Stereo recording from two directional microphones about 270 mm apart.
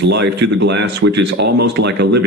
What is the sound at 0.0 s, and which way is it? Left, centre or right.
Speech, right.